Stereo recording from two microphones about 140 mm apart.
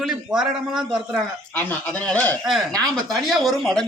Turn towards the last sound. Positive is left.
turn(degrees=0)  # may be behind; listen again after turning